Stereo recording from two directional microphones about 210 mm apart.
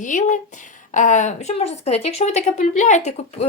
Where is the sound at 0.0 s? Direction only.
35° left (ahead or behind).